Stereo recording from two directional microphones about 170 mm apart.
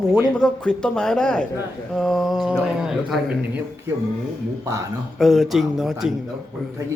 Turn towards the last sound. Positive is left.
turn(degrees=0)  # may be behind; listen again after turning